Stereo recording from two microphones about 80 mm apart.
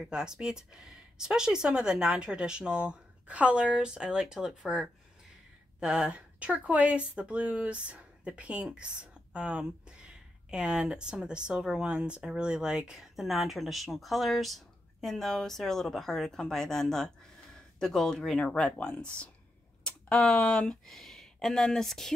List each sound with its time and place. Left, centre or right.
0.0 s a woman's voice: centre